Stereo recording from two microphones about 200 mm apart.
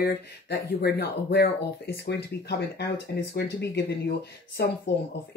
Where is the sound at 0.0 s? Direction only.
50° left (ahead or behind).